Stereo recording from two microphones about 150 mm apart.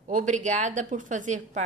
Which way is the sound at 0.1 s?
55° right (ahead or behind).